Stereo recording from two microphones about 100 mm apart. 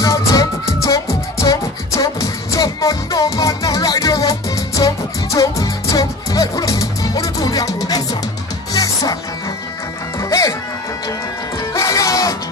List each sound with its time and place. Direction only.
0.0 s music: 35° left (ahead or behind)
0.8 s beatboxing: 35° left (ahead or behind)
8.7 s music: 35° left (ahead or behind)
11.7 s music: 30° left (ahead or behind)